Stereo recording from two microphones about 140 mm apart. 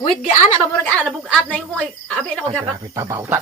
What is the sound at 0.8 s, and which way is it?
A woman's voice, 5° left (ahead or behind).